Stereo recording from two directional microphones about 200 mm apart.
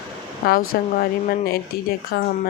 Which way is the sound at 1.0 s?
45° left (ahead or behind).